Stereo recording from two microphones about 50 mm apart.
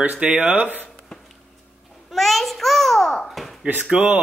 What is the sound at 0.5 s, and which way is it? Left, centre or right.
Speech, right.